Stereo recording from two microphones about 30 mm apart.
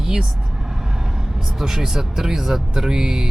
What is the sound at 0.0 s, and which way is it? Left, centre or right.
Speech, centre.